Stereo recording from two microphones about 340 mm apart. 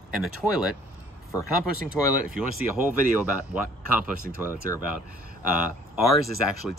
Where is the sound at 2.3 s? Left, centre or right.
Centre.